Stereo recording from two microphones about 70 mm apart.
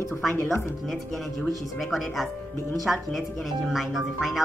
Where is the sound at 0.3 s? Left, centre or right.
Left.